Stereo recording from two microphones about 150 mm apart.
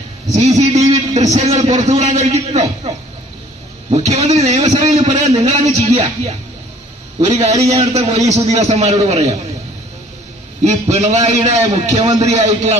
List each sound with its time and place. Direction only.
0.3 s a man's voice: 45° right (ahead or behind)
4.1 s a man's voice: 45° right (ahead or behind)
10.6 s a man's voice: 45° right (ahead or behind)